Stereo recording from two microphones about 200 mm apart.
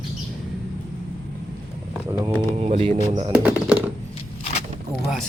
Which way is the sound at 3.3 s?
5° right (ahead or behind).